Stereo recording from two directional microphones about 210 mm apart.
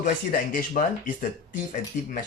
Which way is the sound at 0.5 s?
40° left (ahead or behind).